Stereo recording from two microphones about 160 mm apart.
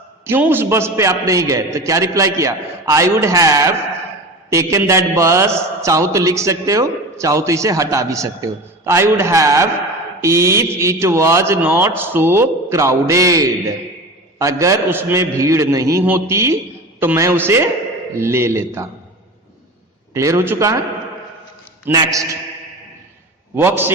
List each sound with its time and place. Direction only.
0.3 s a man's voice: 10° right (ahead or behind)
20.1 s a man's voice: 15° right (ahead or behind)
21.9 s a man's voice: 20° right (ahead or behind)
23.6 s speech: 15° right (ahead or behind)